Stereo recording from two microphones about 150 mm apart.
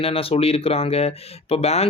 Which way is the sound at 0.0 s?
40° left (ahead or behind).